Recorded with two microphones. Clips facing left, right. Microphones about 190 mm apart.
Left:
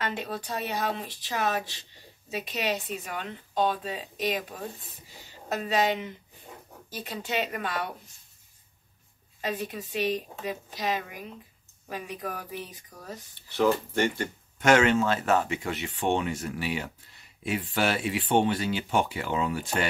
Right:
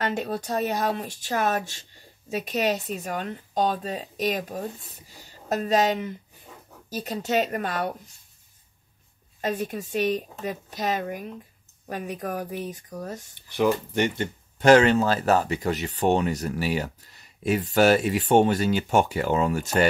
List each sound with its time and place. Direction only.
0.0 s speech: 45° right (ahead or behind)
9.4 s speech: 45° right (ahead or behind)
13.5 s speech: 15° right (ahead or behind); by 19.9 s 45° right (ahead or behind)